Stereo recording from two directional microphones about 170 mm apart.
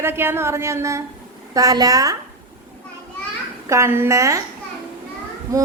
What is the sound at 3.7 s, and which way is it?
Speech, 15° right (ahead or behind).